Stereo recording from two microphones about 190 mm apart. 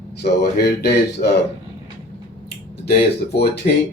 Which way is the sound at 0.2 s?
60° left (ahead or behind).